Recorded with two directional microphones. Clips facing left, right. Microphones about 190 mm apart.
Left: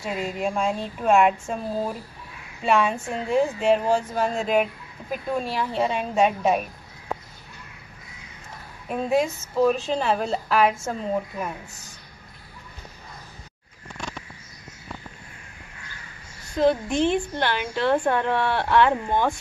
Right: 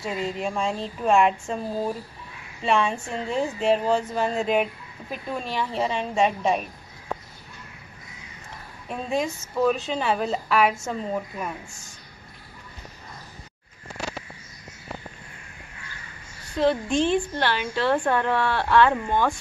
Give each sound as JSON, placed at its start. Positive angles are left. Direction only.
{"t": 0.0, "sound": "a woman's voice", "side_deg": 5}
{"t": 2.6, "sound": "a woman's voice", "side_deg": 5}
{"t": 8.8, "sound": "a woman's voice", "side_deg": 5}
{"t": 16.5, "sound": "a woman's voice", "side_deg": 15}